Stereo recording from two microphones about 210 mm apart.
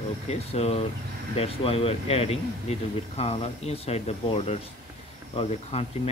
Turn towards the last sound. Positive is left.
turn(degrees=30)  # may be behind; listen again after turning